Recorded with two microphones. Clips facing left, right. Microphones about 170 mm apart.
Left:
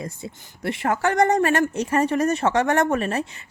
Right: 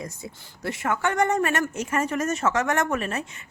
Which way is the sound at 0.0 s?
25° left (ahead or behind).